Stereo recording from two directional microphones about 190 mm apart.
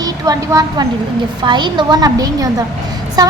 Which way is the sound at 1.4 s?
25° right (ahead or behind).